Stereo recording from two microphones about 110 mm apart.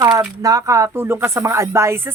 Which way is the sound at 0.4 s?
30° right (ahead or behind).